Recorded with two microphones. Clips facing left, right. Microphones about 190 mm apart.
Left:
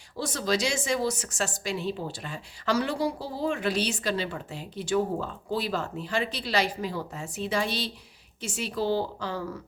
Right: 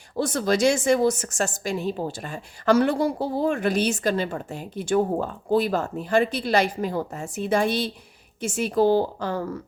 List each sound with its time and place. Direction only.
0.2 s a woman's voice: 55° right (ahead or behind)